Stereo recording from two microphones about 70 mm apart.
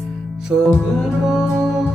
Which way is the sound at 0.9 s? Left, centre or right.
Centre.